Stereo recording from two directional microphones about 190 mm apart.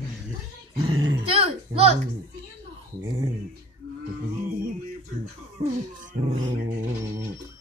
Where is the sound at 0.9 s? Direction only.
90° right.